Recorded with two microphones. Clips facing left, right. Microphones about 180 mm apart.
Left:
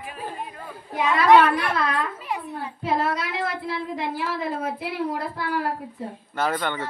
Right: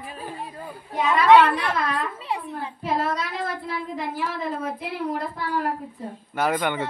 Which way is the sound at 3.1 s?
65° left (ahead or behind).